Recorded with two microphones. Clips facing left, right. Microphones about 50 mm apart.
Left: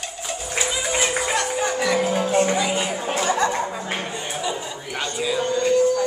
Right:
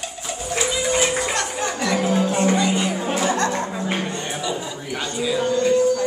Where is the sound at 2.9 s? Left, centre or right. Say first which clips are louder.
Right 1 dB; centre.